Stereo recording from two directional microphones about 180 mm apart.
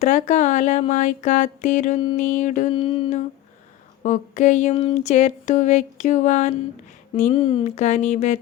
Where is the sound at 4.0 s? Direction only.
45° left (ahead or behind).